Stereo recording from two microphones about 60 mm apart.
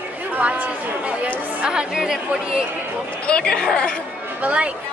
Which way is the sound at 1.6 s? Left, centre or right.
Centre.